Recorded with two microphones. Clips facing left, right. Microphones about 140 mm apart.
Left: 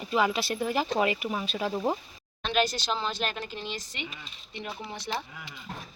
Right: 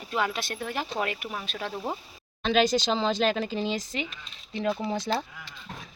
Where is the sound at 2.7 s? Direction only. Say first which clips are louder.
Right 11 dB; 90° right.